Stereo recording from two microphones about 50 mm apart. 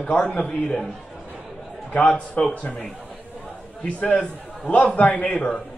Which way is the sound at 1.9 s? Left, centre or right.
Left.